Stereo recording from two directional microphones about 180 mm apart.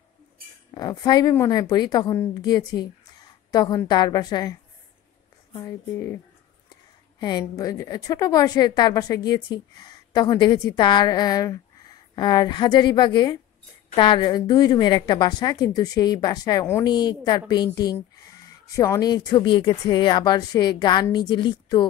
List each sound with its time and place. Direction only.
0.7 s a woman's voice: 20° left (ahead or behind)
5.6 s speech: 15° left (ahead or behind)
7.2 s a woman's voice: 20° left (ahead or behind)